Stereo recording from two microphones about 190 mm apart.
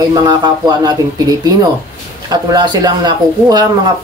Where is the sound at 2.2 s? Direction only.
20° right (ahead or behind).